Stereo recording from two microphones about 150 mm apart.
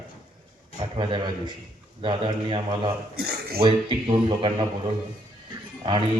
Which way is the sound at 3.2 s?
90° right.